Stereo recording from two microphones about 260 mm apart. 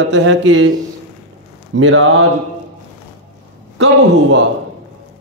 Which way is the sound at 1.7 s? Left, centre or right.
Right.